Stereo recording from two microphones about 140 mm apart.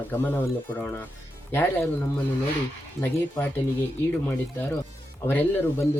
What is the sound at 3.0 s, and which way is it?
Speech, centre (ahead or behind).